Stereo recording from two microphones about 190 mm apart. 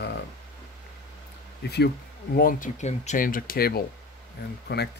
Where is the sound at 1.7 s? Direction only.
55° left (ahead or behind).